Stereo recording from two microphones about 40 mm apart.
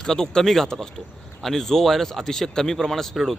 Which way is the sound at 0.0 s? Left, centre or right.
Centre.